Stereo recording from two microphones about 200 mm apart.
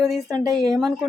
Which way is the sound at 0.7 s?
Centre (ahead or behind).